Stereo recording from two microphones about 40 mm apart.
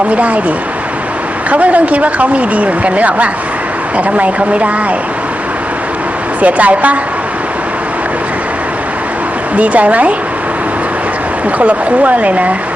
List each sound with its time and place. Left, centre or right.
0.1 s a woman's voice: right
1.5 s a woman's voice: right
6.4 s a woman's voice: right
9.6 s a woman's voice: right
11.6 s a woman's voice: right